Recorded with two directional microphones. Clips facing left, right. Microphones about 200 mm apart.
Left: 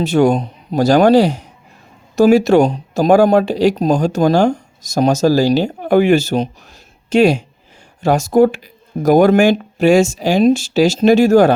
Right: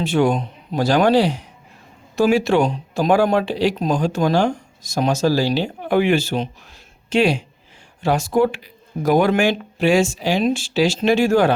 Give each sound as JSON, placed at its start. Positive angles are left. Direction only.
{"t": 0.0, "sound": "speech", "side_deg": 40}